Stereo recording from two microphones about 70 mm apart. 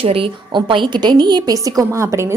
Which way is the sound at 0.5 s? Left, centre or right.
Right.